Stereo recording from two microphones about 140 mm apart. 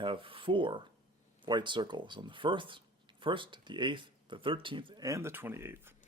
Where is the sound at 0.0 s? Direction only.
35° right (ahead or behind).